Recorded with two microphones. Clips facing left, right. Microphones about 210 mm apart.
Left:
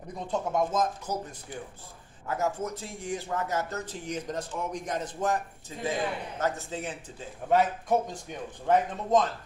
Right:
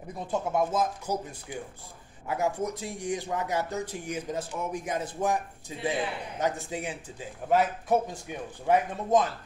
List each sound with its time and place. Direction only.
0.3 s a man's voice: 5° right (ahead or behind)